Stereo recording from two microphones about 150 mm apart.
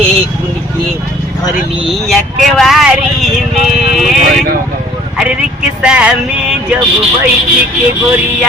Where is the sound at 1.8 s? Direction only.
Centre (ahead or behind).